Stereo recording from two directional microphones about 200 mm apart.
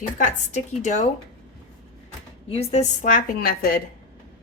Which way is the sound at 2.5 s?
30° left (ahead or behind).